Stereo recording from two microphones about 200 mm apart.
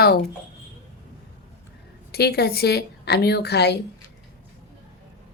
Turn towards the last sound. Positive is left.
turn(degrees=55)  # may be behind; listen again after turning